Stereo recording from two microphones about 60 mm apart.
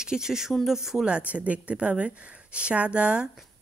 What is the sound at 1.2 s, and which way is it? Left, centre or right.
A woman's voice, right.